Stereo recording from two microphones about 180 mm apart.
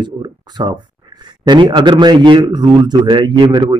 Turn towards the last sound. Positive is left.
turn(degrees=-25)  # may be behind; listen again after turning